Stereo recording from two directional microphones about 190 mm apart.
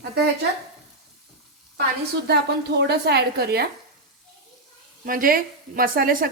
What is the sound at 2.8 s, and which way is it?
Speech, 60° right (ahead or behind).